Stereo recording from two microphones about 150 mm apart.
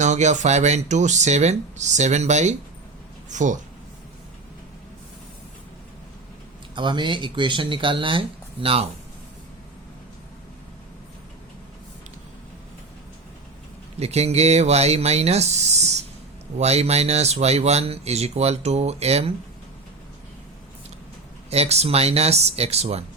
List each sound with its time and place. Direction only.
0.0 s speech: 50° right (ahead or behind)
6.7 s speech: 30° right (ahead or behind)
14.0 s speech: 45° right (ahead or behind)
21.5 s speech: 45° right (ahead or behind)